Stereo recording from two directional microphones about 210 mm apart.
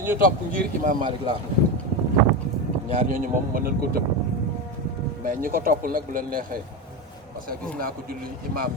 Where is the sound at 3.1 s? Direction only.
40° right (ahead or behind).